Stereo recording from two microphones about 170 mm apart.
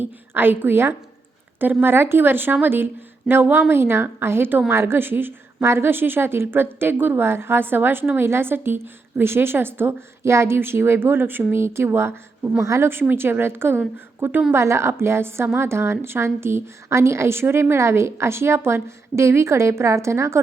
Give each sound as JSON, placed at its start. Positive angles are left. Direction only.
{"t": 0.0, "sound": "a woman's voice", "side_deg": -10}